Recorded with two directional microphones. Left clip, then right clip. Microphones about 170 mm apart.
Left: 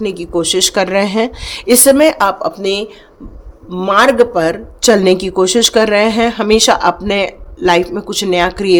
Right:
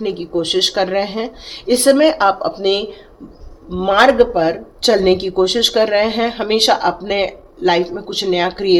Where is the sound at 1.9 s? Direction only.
35° left (ahead or behind).